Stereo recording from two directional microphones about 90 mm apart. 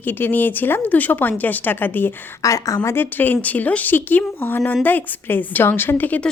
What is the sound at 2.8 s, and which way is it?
A woman's voice, 25° left (ahead or behind).